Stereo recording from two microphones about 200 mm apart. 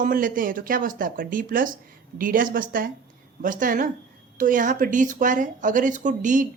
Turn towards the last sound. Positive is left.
turn(degrees=-40)  # may be behind; listen again after turning